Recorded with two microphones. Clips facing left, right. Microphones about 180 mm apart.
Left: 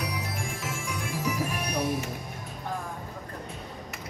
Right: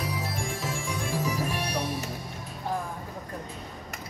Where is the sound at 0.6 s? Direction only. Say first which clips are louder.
Right 2 dB; 35° right (ahead or behind).